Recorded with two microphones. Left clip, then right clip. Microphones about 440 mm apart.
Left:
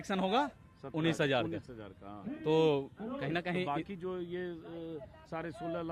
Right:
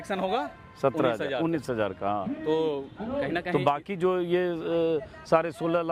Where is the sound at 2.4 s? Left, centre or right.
Left.